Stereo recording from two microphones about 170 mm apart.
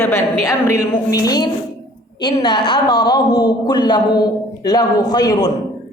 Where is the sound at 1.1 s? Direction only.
20° left (ahead or behind).